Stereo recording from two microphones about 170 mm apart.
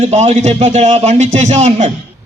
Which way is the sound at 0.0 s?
40° right (ahead or behind).